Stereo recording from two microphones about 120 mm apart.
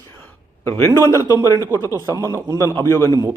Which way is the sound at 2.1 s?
30° right (ahead or behind).